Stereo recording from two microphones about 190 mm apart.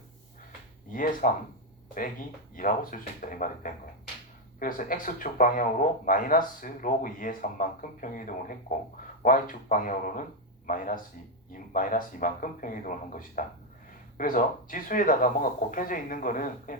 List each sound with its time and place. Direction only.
0.9 s speech: 45° left (ahead or behind)
2.6 s speech: 45° left (ahead or behind)